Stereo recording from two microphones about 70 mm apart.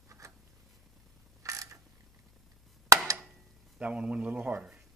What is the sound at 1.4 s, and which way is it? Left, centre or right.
Mechanisms, right.